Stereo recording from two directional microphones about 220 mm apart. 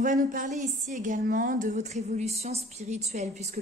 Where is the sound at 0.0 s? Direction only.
35° right (ahead or behind).